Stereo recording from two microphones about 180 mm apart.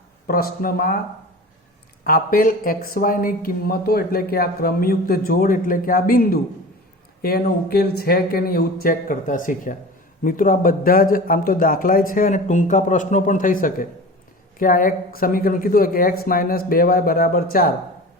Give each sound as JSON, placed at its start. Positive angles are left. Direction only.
{"t": 0.3, "sound": "speech", "side_deg": 55}
{"t": 2.0, "sound": "speech", "side_deg": 50}